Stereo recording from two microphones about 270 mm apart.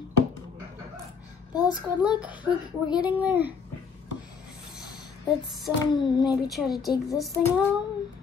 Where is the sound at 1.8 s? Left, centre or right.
Centre.